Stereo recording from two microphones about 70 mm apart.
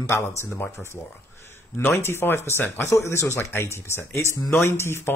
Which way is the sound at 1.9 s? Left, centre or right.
Left.